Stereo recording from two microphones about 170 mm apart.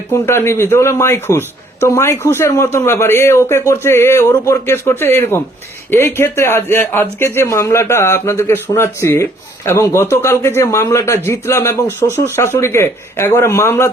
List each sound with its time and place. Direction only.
0.1 s speech: 15° left (ahead or behind)